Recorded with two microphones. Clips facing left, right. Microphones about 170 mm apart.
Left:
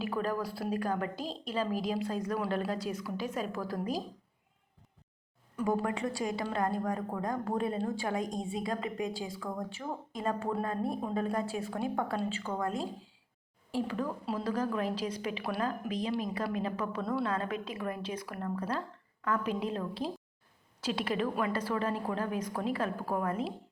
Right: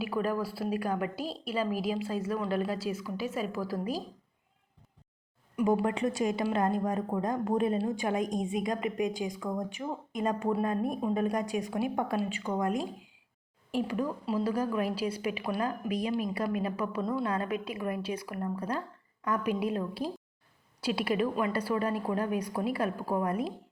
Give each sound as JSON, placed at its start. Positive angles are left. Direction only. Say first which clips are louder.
{"t": 0.0, "sound": "a woman's voice", "louder": "right 2 dB", "side_deg": -10}
{"t": 5.5, "sound": "a woman's voice", "louder": "right 4 dB", "side_deg": -15}